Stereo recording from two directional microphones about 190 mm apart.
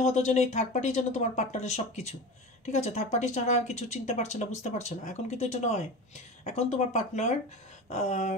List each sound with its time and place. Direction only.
0.0 s speech: 35° left (ahead or behind)